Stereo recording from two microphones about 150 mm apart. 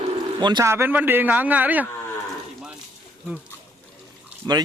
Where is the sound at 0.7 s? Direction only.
15° right (ahead or behind).